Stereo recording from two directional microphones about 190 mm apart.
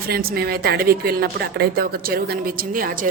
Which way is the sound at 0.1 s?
55° right (ahead or behind).